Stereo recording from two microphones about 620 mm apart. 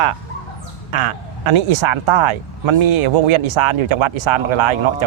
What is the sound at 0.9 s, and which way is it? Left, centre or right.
Speech, right.